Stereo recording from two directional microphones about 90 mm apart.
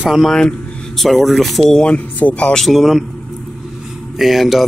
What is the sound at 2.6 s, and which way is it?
Speech, centre (ahead or behind).